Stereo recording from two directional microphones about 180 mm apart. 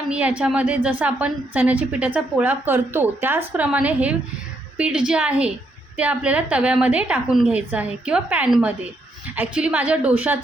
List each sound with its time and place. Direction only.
0.1 s a woman's voice: 5° right (ahead or behind)